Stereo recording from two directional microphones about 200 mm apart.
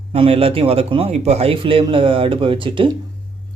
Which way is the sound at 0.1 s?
30° right (ahead or behind).